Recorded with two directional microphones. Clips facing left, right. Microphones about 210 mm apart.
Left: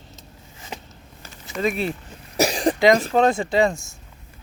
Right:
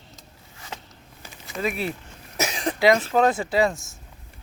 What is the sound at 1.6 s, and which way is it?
Speech, 10° right (ahead or behind).